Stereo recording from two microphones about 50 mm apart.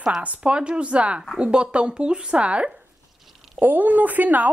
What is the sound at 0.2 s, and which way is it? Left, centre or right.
Speech, right.